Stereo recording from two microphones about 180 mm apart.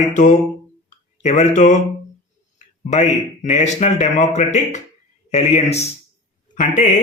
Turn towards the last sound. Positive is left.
turn(degrees=45)  # may be behind; listen again after turning